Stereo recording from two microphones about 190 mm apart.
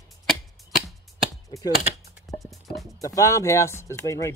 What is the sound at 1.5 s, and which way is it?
Speech, 20° left (ahead or behind).